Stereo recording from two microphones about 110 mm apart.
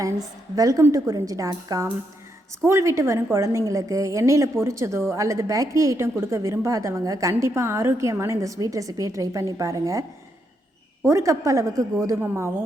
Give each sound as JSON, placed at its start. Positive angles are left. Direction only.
{"t": 0.5, "sound": "a woman's voice", "side_deg": -35}
{"t": 11.0, "sound": "a woman's voice", "side_deg": -25}